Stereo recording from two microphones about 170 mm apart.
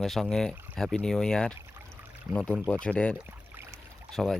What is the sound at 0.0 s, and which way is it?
Speech, centre (ahead or behind).